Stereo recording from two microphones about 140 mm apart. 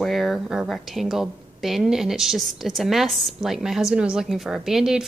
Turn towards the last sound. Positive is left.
turn(degrees=-5)  # may be behind; listen again after turning